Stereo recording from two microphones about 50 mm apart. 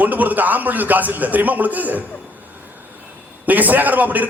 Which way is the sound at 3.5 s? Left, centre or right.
Right.